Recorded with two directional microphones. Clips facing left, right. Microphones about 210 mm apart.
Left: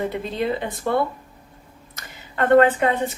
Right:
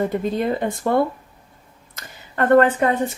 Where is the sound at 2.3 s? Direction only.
45° right (ahead or behind).